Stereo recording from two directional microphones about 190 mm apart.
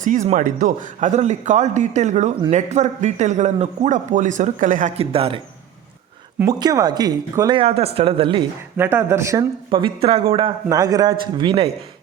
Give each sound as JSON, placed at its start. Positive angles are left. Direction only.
{"t": 0.0, "sound": "a man's voice", "side_deg": -40}
{"t": 6.4, "sound": "a man's voice", "side_deg": -20}
{"t": 7.6, "sound": "a man's voice", "side_deg": -30}
{"t": 8.8, "sound": "speech", "side_deg": -10}
{"t": 9.6, "sound": "a man's voice", "side_deg": -30}